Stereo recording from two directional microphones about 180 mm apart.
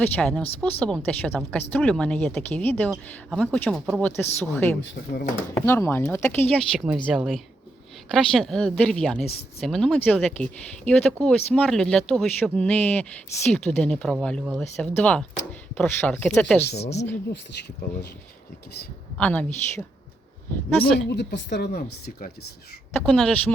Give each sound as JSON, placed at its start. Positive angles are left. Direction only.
{"t": 0.0, "sound": "speech", "side_deg": 5}
{"t": 16.7, "sound": "speech", "side_deg": 35}
{"t": 17.3, "sound": "speech", "side_deg": 65}
{"t": 19.1, "sound": "speech", "side_deg": 10}
{"t": 20.8, "sound": "speech", "side_deg": 35}
{"t": 21.1, "sound": "speech", "side_deg": 70}
{"t": 22.9, "sound": "speech", "side_deg": 5}